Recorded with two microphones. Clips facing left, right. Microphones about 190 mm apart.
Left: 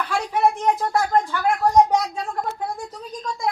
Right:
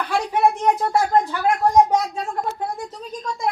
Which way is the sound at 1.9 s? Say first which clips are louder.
Right 1 dB; 5° right (ahead or behind).